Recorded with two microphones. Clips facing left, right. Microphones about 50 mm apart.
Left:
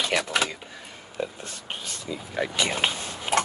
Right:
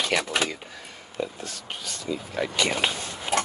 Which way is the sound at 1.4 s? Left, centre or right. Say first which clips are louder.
Even; left.